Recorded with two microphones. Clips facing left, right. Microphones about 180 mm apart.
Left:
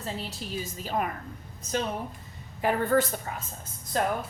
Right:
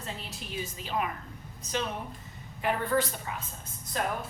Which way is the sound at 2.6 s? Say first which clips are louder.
Left 4 dB; 45° left (ahead or behind).